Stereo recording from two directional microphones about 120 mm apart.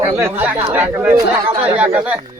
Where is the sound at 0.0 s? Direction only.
20° right (ahead or behind).